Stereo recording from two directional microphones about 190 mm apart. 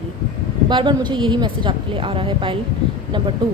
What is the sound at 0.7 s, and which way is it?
A woman's voice, 25° right (ahead or behind).